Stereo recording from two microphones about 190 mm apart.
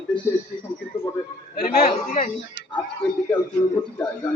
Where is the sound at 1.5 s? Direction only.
55° left (ahead or behind).